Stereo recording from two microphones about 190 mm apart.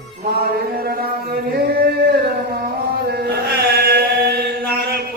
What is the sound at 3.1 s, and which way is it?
Chant, 55° right (ahead or behind).